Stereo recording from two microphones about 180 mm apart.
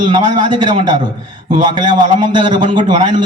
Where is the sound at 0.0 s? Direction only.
25° right (ahead or behind).